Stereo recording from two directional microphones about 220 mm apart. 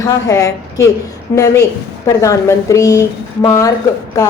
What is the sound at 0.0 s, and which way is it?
Speech, 15° left (ahead or behind).